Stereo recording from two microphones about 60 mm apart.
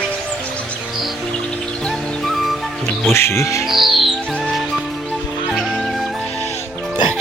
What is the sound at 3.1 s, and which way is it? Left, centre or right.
Speech, left.